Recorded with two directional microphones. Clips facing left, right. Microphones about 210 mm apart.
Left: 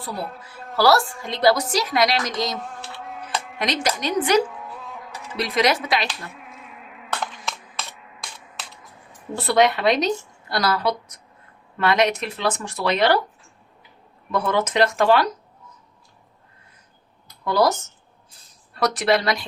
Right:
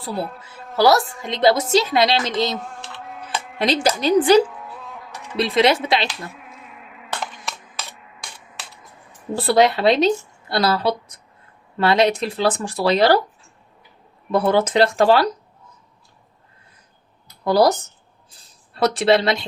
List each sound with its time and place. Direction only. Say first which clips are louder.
0.8 s a woman's voice: right 2 dB; 20° right (ahead or behind)
2.6 s a sound: even; centre (ahead or behind)
3.6 s speech: right 6 dB; 30° right (ahead or behind)
4.4 s insect: even; centre (ahead or behind)
5.4 s a woman's voice: right 4 dB; 25° right (ahead or behind)
6.3 s insect: even; centre (ahead or behind)
9.3 s a woman's voice: right 2 dB; 30° right (ahead or behind)
14.3 s speech: right 5 dB; 30° right (ahead or behind)
17.4 s a woman's voice: right 4 dB; 35° right (ahead or behind)